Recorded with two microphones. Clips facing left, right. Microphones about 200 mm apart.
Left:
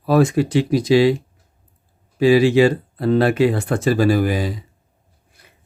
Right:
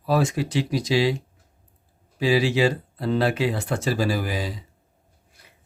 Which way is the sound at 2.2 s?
55° left (ahead or behind).